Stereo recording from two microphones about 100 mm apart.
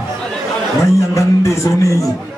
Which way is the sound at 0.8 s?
30° left (ahead or behind).